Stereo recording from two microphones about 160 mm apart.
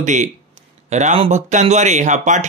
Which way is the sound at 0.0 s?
50° right (ahead or behind).